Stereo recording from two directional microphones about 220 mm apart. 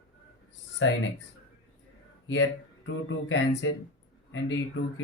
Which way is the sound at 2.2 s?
60° left (ahead or behind).